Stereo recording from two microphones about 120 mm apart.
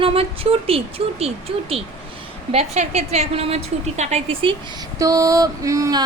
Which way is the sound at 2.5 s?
65° right (ahead or behind).